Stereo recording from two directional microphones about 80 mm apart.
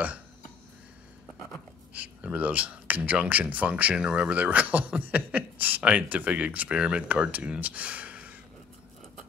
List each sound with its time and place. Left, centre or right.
2.0 s speech: centre